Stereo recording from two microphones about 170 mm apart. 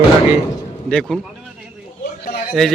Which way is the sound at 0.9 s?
5° left (ahead or behind).